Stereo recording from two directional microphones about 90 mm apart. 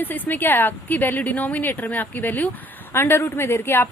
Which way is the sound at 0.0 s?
20° left (ahead or behind).